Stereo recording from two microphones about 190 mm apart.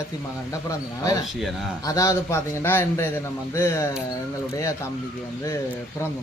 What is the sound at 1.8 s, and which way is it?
Speech, 15° left (ahead or behind).